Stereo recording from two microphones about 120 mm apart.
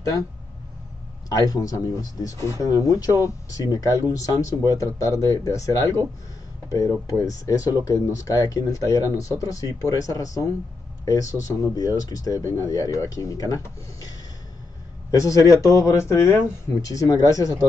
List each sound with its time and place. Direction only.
1.3 s speech: 30° left (ahead or behind)